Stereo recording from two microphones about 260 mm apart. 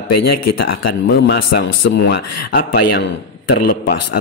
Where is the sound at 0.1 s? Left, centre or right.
Left.